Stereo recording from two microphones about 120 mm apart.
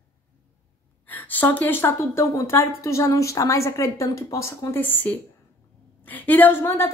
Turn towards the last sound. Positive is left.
turn(degrees=20)  # may be behind; listen again after turning